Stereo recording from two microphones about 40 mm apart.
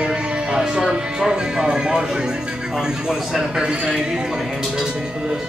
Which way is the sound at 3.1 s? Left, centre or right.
Centre.